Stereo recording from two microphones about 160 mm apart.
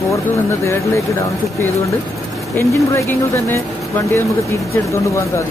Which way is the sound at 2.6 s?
15° left (ahead or behind).